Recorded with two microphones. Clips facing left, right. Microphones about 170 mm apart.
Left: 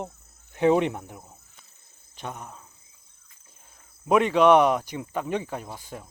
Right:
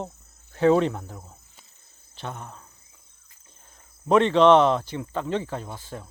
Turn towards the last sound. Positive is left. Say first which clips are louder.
# right 1 dB
turn(degrees=15)  # may be behind; listen again after turning